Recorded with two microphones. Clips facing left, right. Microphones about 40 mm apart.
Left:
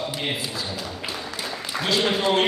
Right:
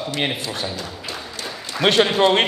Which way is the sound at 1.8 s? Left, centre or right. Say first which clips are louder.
Right 7 dB; right.